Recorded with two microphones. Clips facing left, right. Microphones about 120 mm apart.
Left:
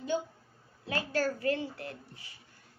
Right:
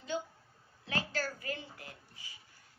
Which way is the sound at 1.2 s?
70° left (ahead or behind).